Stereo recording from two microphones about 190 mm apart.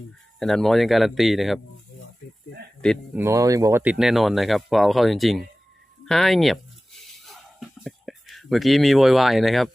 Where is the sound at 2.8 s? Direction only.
Centre (ahead or behind).